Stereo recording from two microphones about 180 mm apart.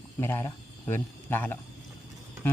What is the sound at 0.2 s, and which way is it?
Speech, 15° left (ahead or behind).